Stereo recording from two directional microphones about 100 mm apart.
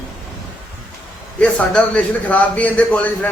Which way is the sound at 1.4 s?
10° left (ahead or behind).